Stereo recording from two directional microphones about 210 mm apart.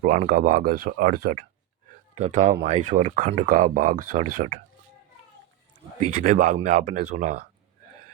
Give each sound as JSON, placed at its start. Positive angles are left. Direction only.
{"t": 0.0, "sound": "speech", "side_deg": -40}
{"t": 6.0, "sound": "speech", "side_deg": -40}